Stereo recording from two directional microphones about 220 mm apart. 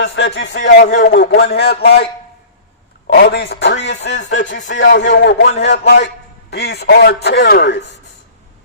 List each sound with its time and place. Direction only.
0.0 s a man's voice: 55° left (ahead or behind)
0.9 s a man's voice: 35° left (ahead or behind)
3.1 s a man's voice: 50° left (ahead or behind)